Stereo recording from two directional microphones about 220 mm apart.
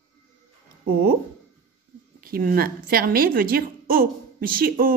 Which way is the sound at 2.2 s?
40° right (ahead or behind).